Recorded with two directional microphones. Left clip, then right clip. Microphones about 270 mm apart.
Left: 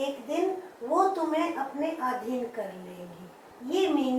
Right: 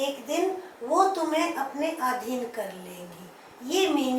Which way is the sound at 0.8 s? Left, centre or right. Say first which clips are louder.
Right 2 dB; centre.